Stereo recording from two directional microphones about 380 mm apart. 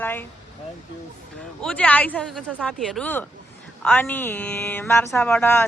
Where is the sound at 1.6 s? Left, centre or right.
Centre.